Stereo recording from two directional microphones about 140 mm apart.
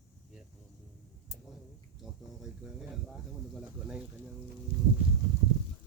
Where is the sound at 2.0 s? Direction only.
Centre (ahead or behind).